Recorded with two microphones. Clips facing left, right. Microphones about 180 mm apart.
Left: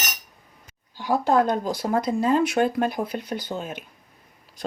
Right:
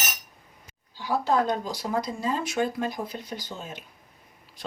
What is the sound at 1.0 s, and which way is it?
Speech, 55° left (ahead or behind).